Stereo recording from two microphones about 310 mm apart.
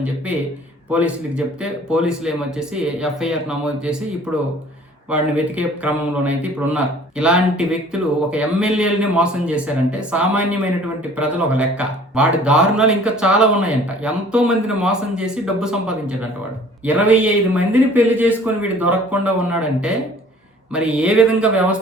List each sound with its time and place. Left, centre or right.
0.9 s speech: centre
5.1 s speech: centre